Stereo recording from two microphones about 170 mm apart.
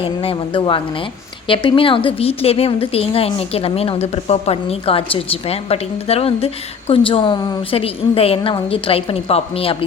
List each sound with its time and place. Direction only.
0.0 s a woman's voice: 35° left (ahead or behind)